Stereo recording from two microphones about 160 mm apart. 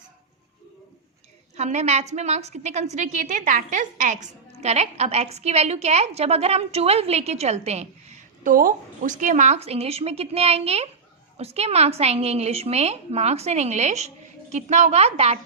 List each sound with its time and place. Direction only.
1.5 s a woman's voice: 45° right (ahead or behind)